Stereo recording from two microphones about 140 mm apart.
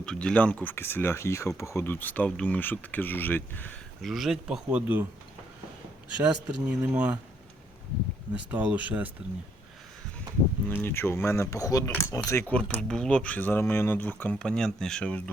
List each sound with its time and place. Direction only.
0.0 s speech: 5° left (ahead or behind)
4.0 s speech: centre (ahead or behind)
6.7 s speech: 10° right (ahead or behind)
8.3 s speech: 10° right (ahead or behind)
10.7 s speech: 15° left (ahead or behind)
12.5 s speech: 5° left (ahead or behind)